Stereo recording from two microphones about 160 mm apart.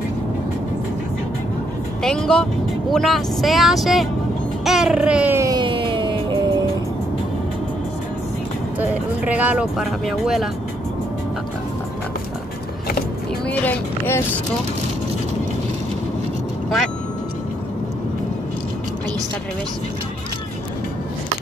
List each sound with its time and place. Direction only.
2.0 s speech: 5° left (ahead or behind)
4.6 s a sound: 5° right (ahead or behind)
5.6 s music: 30° right (ahead or behind)
8.7 s speech: 10° right (ahead or behind)
13.5 s speech: 10° left (ahead or behind)